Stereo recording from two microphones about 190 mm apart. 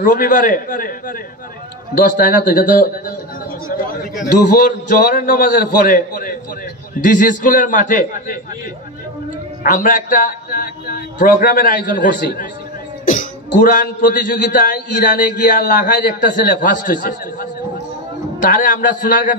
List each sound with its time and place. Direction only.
0.0 s a man's voice: 45° left (ahead or behind)
4.6 s a man's voice: 45° left (ahead or behind)
9.6 s a man's voice: 45° left (ahead or behind)